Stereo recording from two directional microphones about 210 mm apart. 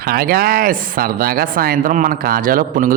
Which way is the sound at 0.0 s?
45° right (ahead or behind).